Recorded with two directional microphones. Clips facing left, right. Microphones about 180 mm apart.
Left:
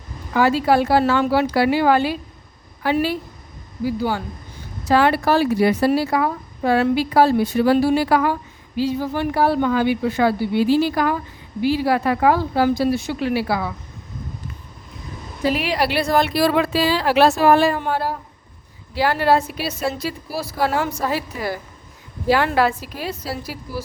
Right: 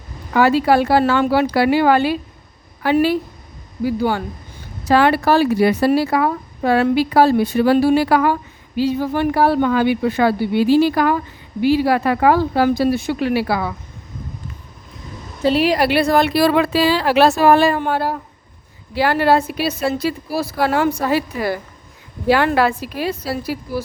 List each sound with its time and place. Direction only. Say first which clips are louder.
0.3 s a woman's voice: right 2 dB; 70° right (ahead or behind)
15.5 s a woman's voice: right 8 dB; 40° right (ahead or behind); by 23.8 s 60° right (ahead or behind)